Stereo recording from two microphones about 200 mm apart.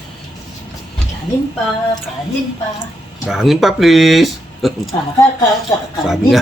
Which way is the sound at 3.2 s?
Centre (ahead or behind).